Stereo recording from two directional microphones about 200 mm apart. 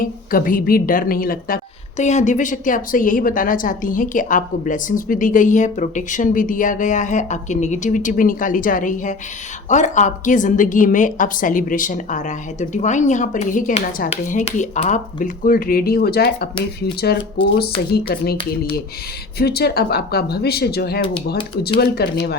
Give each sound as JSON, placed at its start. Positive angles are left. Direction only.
{"t": 0.0, "sound": "a woman's voice", "side_deg": 45}
{"t": 17.9, "sound": "speech", "side_deg": 50}